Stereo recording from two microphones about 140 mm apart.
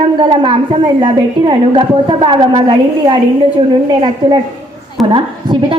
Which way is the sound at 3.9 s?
35° right (ahead or behind).